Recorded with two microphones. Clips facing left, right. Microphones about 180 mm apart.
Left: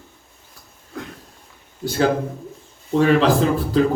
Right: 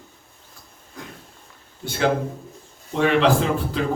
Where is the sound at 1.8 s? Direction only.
40° left (ahead or behind).